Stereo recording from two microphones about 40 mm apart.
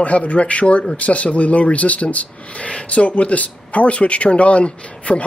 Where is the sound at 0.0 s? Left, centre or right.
Left.